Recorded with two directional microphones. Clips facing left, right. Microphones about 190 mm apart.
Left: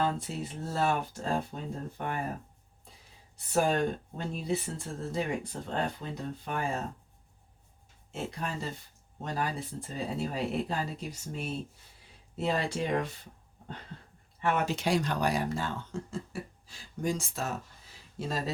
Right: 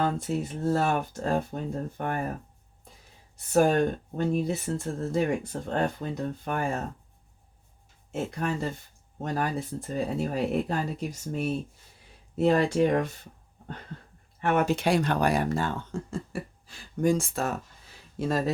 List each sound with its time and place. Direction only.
0.0 s speech: 50° right (ahead or behind)
3.3 s speech: 50° right (ahead or behind)
8.1 s speech: 55° right (ahead or behind)
14.4 s speech: 50° right (ahead or behind)